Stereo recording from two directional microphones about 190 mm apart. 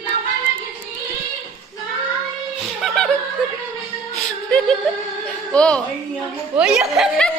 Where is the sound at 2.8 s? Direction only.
Centre (ahead or behind).